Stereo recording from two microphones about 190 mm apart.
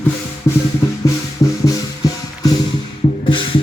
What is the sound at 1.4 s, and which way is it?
Music, 15° left (ahead or behind).